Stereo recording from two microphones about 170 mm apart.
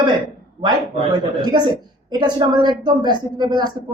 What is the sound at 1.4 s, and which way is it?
Speech, 25° right (ahead or behind).